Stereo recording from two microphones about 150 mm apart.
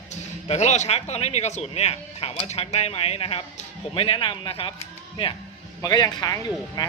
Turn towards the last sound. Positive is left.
turn(degrees=25)  # may be behind; listen again after turning